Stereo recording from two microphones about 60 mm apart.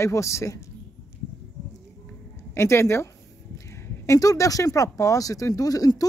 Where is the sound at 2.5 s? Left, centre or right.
Left.